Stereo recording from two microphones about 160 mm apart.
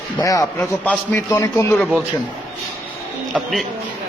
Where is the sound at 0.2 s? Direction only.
20° left (ahead or behind).